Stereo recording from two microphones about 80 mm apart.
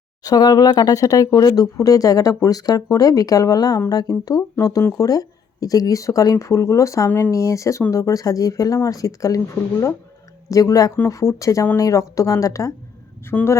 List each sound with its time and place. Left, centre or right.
0.3 s speech: left
10.5 s speech: left
13.3 s speech: centre